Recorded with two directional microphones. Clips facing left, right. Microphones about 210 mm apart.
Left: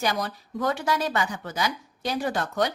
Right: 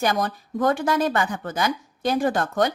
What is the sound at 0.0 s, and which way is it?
Speech, 50° right (ahead or behind).